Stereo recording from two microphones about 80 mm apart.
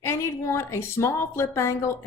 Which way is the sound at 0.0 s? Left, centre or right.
Left.